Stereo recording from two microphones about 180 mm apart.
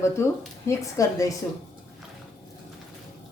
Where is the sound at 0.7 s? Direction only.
20° left (ahead or behind).